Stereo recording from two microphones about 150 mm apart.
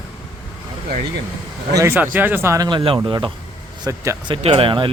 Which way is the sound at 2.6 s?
35° right (ahead or behind).